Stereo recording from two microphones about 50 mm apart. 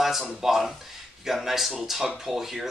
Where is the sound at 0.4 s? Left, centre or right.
Centre.